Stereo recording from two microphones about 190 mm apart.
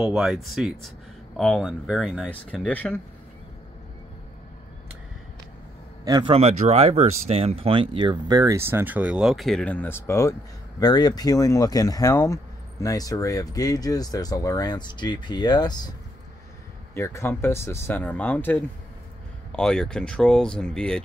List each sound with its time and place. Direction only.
0.0 s speech: centre (ahead or behind)
6.0 s speech: 25° right (ahead or behind); by 15.9 s 20° left (ahead or behind)
16.9 s speech: 15° left (ahead or behind)